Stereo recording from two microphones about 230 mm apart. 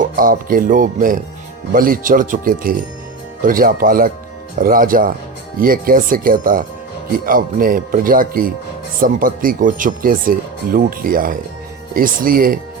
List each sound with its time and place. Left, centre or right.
0.0 s speech: right